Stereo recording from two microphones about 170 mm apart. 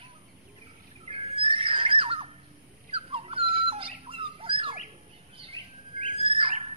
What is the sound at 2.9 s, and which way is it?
Dog, 35° right (ahead or behind).